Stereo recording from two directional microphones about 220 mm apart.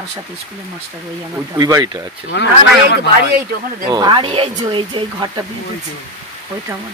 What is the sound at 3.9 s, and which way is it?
Speech, 20° right (ahead or behind).